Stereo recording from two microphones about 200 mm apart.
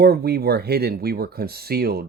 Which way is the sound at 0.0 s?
50° right (ahead or behind).